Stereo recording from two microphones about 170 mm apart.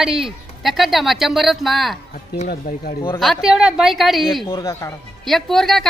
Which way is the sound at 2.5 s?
65° left (ahead or behind).